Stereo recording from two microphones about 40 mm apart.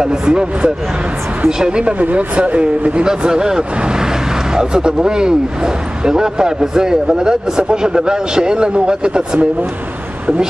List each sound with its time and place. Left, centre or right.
0.0 s a man's voice: centre